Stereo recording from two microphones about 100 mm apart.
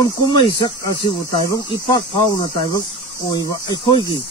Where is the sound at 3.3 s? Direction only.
45° left (ahead or behind).